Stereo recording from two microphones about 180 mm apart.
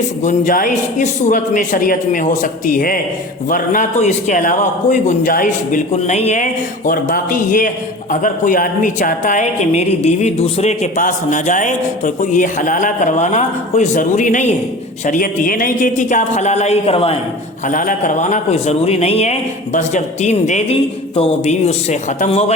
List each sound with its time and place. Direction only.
0.2 s a woman's voice: 45° left (ahead or behind)
17.7 s a man's voice: 45° left (ahead or behind)